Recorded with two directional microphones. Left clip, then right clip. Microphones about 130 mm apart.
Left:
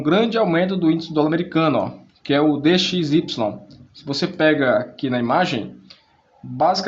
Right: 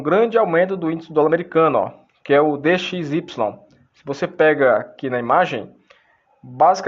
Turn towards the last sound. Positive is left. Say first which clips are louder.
# right 3 dB
turn(degrees=-60)  # may be behind; listen again after turning